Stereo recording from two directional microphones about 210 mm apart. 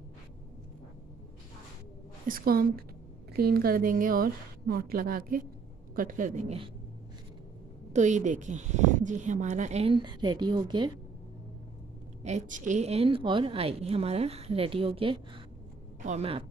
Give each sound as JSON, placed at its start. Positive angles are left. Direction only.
{"t": 2.2, "sound": "a woman's voice", "side_deg": -45}
{"t": 7.9, "sound": "a woman's voice", "side_deg": -35}
{"t": 12.2, "sound": "a woman's voice", "side_deg": -35}